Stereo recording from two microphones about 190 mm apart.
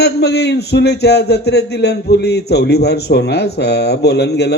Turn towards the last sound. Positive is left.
turn(degrees=60)  # may be behind; listen again after turning